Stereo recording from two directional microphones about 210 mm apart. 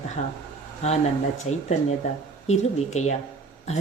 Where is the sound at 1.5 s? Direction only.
90° left.